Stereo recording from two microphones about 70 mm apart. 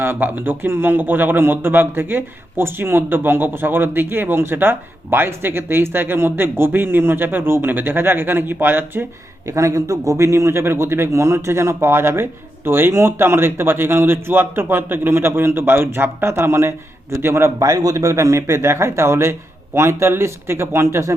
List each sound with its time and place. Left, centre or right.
0.0 s a man's voice: right
9.5 s a man's voice: right